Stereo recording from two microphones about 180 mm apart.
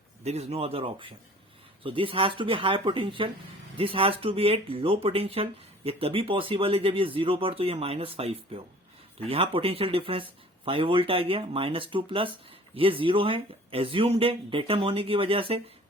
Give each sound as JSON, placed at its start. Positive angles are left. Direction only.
{"t": 0.3, "sound": "speech", "side_deg": -35}